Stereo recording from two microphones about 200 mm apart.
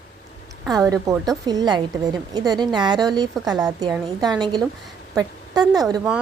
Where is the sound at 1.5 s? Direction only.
20° right (ahead or behind).